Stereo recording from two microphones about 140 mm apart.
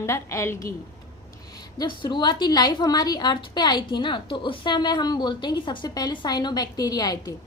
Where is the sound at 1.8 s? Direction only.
30° left (ahead or behind).